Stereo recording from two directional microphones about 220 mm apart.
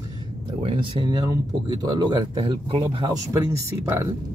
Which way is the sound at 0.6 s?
20° right (ahead or behind).